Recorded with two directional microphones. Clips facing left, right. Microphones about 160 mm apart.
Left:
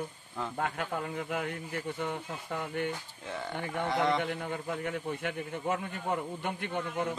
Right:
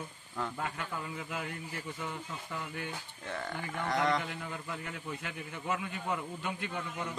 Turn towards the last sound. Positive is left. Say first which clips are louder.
# left 6 dB
turn(degrees=55)  # may be behind; listen again after turning